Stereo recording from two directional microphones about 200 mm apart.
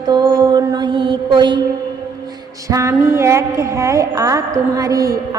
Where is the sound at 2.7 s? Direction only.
15° right (ahead or behind).